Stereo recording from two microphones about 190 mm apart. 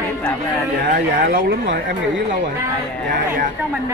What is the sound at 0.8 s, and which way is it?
Speech, 45° right (ahead or behind).